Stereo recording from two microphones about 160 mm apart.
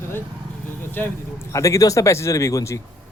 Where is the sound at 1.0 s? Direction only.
10° left (ahead or behind).